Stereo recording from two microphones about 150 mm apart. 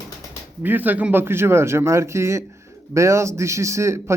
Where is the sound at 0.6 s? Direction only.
10° right (ahead or behind).